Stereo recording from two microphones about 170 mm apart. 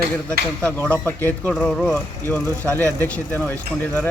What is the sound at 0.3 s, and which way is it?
A man's voice, 10° left (ahead or behind).